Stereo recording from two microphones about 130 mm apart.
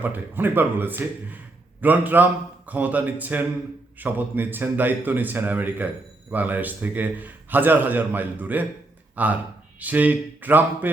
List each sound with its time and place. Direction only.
0.0 s a man's voice: 15° right (ahead or behind)